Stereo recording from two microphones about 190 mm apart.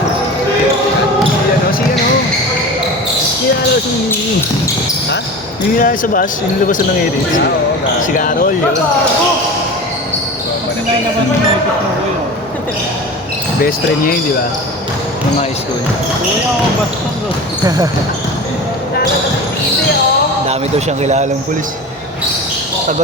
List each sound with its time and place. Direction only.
5.7 s speech: 45° left (ahead or behind)
8.1 s speech: 45° left (ahead or behind)
13.6 s speech: 50° left (ahead or behind)
20.5 s speech: 35° right (ahead or behind)